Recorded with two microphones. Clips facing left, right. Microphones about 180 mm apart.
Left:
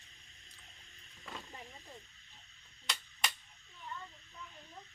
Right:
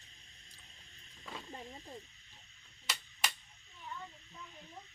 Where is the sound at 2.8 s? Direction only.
Centre (ahead or behind).